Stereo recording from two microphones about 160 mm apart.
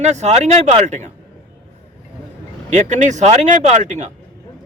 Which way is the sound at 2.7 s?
50° right (ahead or behind).